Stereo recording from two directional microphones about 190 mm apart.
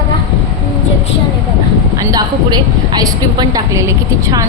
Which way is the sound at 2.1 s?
20° right (ahead or behind).